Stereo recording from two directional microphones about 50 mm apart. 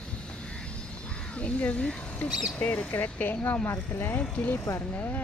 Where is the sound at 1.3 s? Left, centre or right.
Left.